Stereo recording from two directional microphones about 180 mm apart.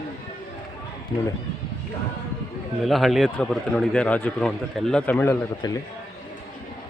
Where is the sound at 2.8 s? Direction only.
Centre (ahead or behind).